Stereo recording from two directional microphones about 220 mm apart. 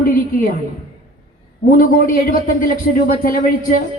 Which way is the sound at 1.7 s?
40° left (ahead or behind).